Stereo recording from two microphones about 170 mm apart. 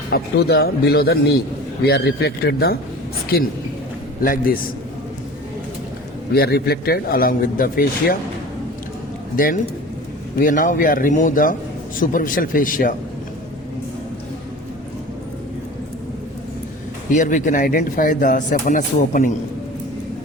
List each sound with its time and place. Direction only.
0.1 s speech: 65° left (ahead or behind)
4.2 s a man's voice: 55° left (ahead or behind)
6.3 s a man's voice: 65° left (ahead or behind)
9.3 s a man's voice: 55° left (ahead or behind)
17.2 s speech: 50° left (ahead or behind)